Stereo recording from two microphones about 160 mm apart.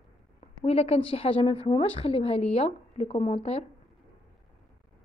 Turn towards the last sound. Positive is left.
turn(degrees=40)  # may be behind; listen again after turning